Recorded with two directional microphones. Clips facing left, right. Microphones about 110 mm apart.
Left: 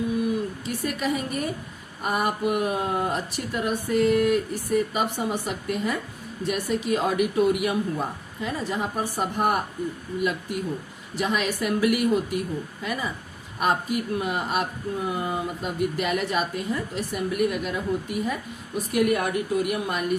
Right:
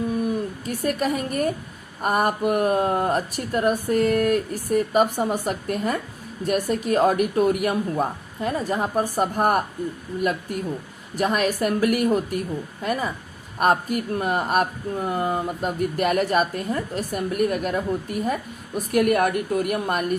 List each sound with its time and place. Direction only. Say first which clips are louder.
0.6 s speech: right 4 dB; 45° right (ahead or behind)